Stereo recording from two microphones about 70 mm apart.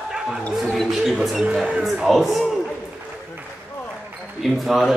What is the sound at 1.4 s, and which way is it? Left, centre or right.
Speech, centre.